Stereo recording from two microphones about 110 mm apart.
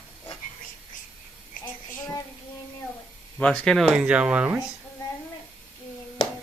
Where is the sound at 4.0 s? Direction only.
10° right (ahead or behind).